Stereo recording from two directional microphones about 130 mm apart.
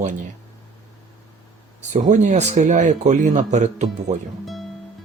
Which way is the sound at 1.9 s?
70° right (ahead or behind).